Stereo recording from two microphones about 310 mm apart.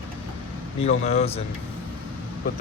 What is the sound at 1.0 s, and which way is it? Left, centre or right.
Speech, left.